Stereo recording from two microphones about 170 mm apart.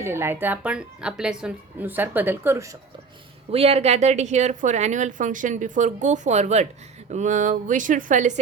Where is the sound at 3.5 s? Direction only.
35° right (ahead or behind).